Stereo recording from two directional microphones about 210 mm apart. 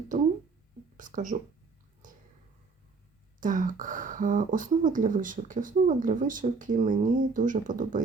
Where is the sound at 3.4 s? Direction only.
40° right (ahead or behind).